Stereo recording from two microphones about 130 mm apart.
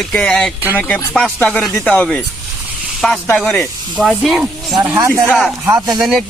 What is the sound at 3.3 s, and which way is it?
Speech, 5° left (ahead or behind).